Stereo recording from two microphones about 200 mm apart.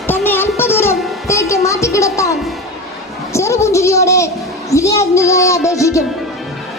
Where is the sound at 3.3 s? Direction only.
15° left (ahead or behind).